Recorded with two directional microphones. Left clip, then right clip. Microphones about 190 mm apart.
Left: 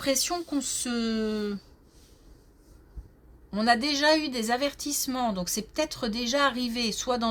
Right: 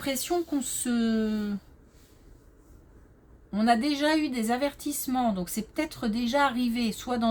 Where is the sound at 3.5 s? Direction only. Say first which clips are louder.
Left 1 dB; 40° left (ahead or behind).